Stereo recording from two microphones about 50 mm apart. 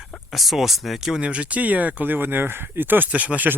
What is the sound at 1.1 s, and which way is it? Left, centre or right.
Speech, right.